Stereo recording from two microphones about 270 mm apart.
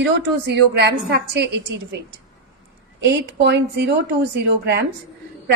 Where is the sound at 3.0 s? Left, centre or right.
Right.